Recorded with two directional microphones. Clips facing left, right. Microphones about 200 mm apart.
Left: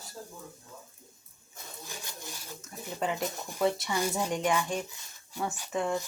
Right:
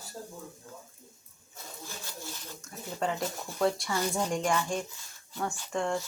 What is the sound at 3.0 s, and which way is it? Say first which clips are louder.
A woman's voice: even; 10° left (ahead or behind).